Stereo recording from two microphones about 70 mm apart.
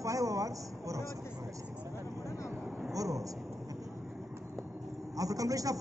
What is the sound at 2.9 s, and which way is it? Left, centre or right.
Speech, right.